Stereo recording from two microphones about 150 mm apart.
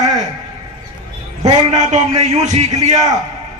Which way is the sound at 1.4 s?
50° right (ahead or behind).